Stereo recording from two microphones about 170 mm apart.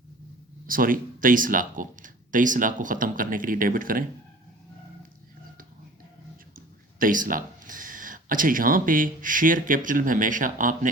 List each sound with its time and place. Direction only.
0.7 s speech: 55° right (ahead or behind)
7.0 s speech: 50° right (ahead or behind)